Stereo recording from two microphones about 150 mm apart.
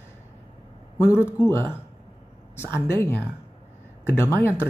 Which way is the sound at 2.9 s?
15° left (ahead or behind).